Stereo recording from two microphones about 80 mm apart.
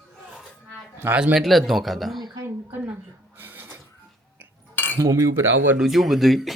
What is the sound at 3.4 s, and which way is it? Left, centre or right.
Printer, right.